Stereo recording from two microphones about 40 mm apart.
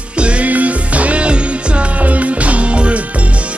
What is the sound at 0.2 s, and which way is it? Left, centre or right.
Music, right.